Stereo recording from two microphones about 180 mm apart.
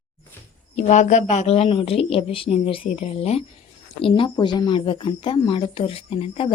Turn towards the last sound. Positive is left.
turn(degrees=30)  # may be behind; listen again after turning